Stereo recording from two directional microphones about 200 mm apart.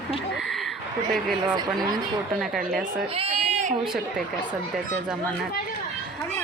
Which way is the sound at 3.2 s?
30° right (ahead or behind).